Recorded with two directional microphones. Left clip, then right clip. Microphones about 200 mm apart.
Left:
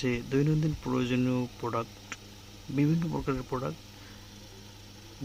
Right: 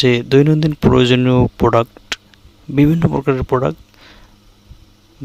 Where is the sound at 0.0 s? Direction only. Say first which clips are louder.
Right 17 dB; 50° right (ahead or behind).